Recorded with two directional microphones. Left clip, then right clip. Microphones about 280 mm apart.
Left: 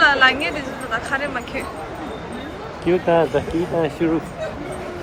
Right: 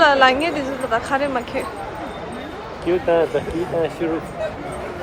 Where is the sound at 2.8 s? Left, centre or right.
Left.